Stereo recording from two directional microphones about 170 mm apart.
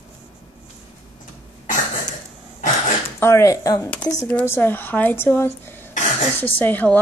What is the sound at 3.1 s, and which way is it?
Speech, 15° left (ahead or behind).